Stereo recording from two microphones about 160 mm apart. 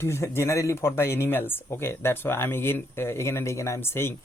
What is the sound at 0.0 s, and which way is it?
Speech, 15° left (ahead or behind).